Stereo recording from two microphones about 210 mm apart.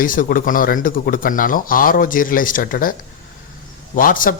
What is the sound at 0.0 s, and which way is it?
Speech, 40° left (ahead or behind).